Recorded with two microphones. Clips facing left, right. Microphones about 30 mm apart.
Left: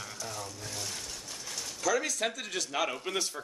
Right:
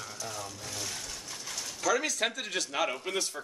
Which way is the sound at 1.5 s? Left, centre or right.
Centre.